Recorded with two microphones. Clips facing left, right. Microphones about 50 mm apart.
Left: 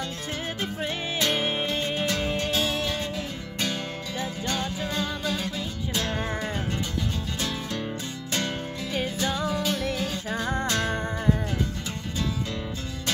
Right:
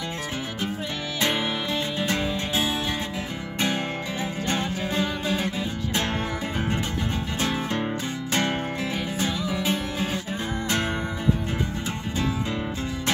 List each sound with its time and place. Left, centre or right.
1.7 s music: right
7.3 s music: right